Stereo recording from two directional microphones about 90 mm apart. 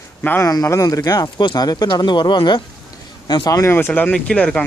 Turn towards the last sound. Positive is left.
turn(degrees=10)  # may be behind; listen again after turning